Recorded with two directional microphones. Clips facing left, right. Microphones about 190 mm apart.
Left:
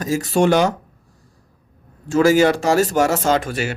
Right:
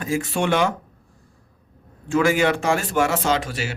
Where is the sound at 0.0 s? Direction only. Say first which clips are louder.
Left 6 dB; 40° left (ahead or behind).